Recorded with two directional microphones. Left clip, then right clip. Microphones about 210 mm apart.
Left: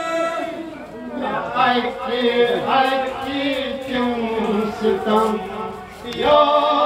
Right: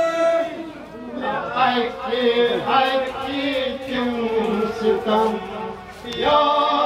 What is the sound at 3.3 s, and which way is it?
Music, centre (ahead or behind).